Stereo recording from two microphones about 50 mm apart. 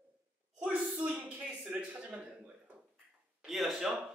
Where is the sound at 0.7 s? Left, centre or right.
Right.